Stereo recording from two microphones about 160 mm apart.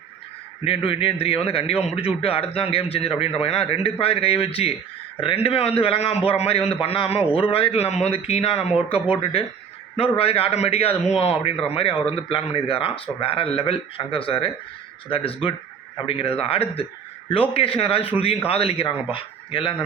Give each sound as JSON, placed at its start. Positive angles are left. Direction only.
{"t": 0.6, "sound": "a man's voice", "side_deg": 35}